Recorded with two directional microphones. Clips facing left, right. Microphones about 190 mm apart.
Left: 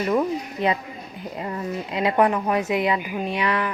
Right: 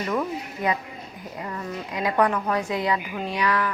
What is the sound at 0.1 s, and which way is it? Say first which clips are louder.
A woman's voice: left 5 dB; 25° left (ahead or behind).